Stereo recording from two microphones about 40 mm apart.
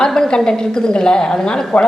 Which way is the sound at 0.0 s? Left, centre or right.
Centre.